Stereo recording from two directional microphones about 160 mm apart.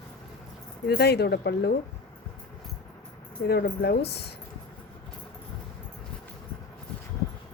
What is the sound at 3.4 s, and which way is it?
Speech, 85° left.